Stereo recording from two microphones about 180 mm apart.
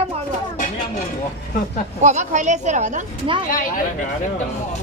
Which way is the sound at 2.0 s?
40° right (ahead or behind).